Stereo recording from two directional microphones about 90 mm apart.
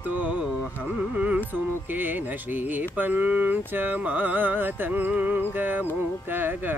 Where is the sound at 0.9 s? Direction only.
15° right (ahead or behind).